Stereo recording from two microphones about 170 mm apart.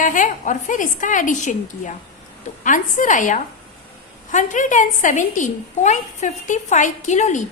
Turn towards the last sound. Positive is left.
turn(degrees=45)  # may be behind; listen again after turning